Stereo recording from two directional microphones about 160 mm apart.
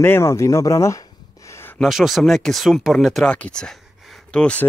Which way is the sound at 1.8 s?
Centre (ahead or behind).